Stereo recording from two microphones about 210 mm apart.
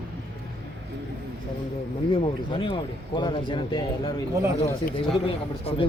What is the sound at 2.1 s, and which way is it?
A man's voice, 25° left (ahead or behind).